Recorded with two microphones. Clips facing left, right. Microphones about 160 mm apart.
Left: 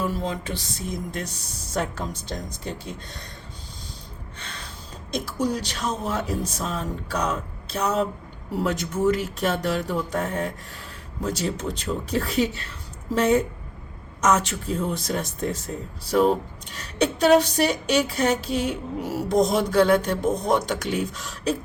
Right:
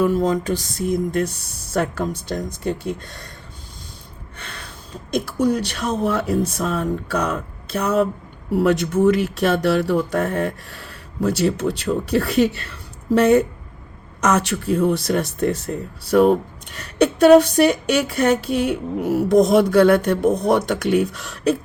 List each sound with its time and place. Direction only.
0.0 s speech: 45° right (ahead or behind)
4.4 s gasp: 55° right (ahead or behind)
5.1 s speech: 55° right (ahead or behind)
8.6 s speech: 70° right (ahead or behind)